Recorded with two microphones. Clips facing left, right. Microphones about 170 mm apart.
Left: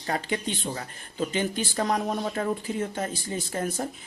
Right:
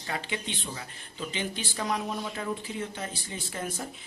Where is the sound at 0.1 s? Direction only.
45° left (ahead or behind).